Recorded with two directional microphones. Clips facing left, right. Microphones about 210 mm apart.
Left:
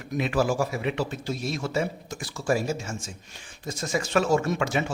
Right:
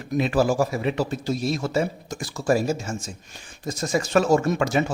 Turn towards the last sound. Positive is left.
turn(degrees=-40)  # may be behind; listen again after turning